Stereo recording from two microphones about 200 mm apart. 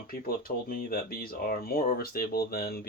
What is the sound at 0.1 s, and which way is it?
Speech, 45° left (ahead or behind).